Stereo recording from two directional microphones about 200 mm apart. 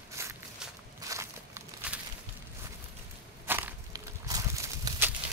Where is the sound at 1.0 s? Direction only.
15° right (ahead or behind).